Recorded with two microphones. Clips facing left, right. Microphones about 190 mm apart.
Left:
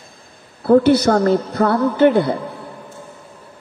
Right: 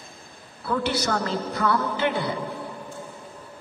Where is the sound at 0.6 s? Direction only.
40° left (ahead or behind).